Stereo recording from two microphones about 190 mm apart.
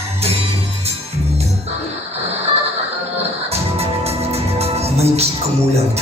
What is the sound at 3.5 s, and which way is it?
Music, 30° right (ahead or behind).